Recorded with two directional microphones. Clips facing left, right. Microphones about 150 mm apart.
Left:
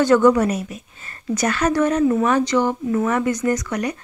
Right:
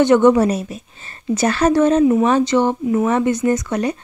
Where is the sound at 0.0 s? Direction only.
20° right (ahead or behind).